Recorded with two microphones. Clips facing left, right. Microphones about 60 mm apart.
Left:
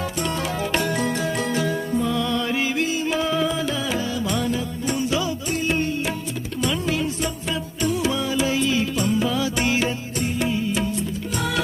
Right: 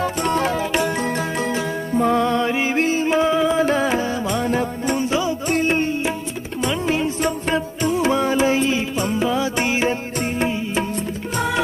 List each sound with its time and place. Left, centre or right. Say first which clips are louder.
0.2 s music: right 5 dB; right
2.0 s music: right 9 dB; right
3.6 s music: right 6 dB; right
5.5 s music: right 7 dB; right
5.7 s music: right 3 dB; right
10.2 s music: right 2 dB; right